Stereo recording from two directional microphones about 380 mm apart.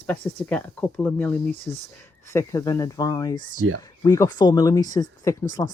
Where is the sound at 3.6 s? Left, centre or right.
Right.